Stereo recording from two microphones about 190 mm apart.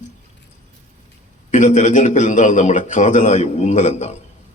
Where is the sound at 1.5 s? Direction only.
40° left (ahead or behind).